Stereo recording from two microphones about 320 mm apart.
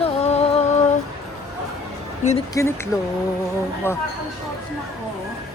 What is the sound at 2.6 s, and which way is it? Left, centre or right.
Speech, centre.